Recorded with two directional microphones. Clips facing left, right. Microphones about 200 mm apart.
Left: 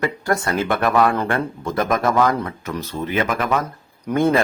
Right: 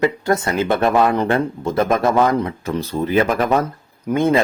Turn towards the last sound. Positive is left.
turn(degrees=-20)  # may be behind; listen again after turning